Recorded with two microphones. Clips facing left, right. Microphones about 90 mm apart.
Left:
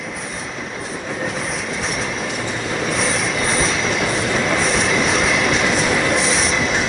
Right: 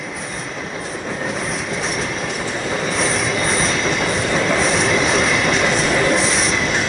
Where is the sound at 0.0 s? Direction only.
Centre (ahead or behind).